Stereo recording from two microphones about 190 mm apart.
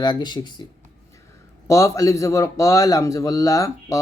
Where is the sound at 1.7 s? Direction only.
15° left (ahead or behind).